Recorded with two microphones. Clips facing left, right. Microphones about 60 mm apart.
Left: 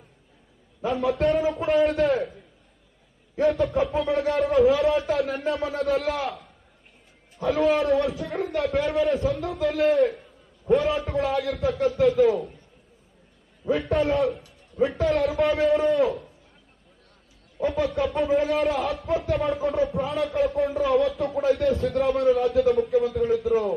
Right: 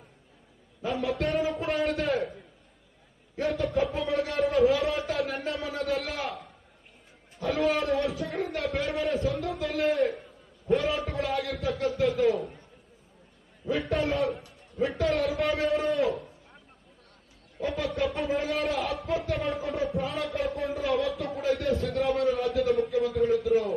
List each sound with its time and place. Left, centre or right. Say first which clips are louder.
0.9 s a man's voice: left 5 dB; left
1.1 s a man's voice: left 6 dB; centre
3.5 s a man's voice: left 4 dB; centre
13.7 s a man's voice: left 4 dB; centre
17.8 s a man's voice: left 5 dB; centre